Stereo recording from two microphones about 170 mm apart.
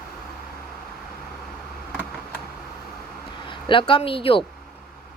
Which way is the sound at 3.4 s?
30° left (ahead or behind).